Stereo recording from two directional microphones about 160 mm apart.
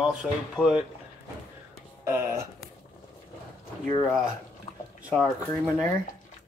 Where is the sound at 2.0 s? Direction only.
15° right (ahead or behind).